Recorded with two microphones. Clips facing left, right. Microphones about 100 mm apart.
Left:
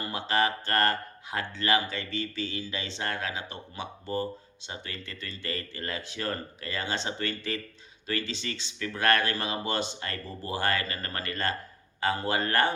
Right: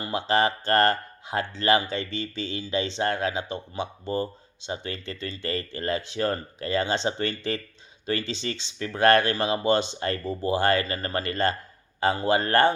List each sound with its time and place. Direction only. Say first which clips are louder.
0.0 s speech: right 4 dB; 25° right (ahead or behind)